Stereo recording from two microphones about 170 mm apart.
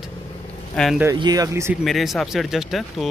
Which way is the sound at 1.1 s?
25° right (ahead or behind).